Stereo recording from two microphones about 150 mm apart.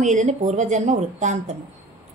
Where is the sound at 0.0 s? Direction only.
55° right (ahead or behind).